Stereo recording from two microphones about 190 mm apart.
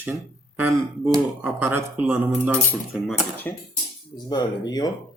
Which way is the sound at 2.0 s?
10° right (ahead or behind).